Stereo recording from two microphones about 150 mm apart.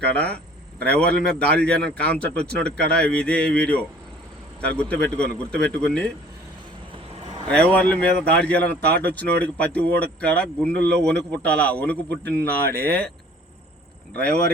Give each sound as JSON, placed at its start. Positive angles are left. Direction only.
{"t": 0.0, "sound": "a man's voice", "side_deg": 10}
{"t": 7.4, "sound": "a man's voice", "side_deg": 10}
{"t": 12.2, "sound": "speech", "side_deg": -90}